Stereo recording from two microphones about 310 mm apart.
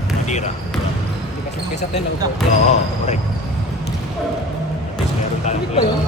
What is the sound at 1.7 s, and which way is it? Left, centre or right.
Speech, left.